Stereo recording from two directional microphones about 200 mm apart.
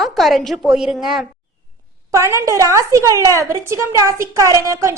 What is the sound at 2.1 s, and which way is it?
A woman's voice, 15° right (ahead or behind).